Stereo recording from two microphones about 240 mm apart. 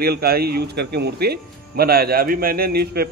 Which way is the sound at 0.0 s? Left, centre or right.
Right.